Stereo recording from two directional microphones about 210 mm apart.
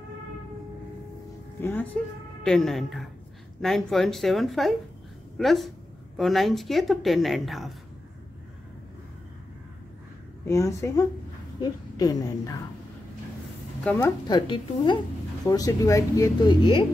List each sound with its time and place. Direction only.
1.6 s a woman's voice: 10° left (ahead or behind)
10.4 s speech: 15° left (ahead or behind)
13.8 s speech: 15° left (ahead or behind)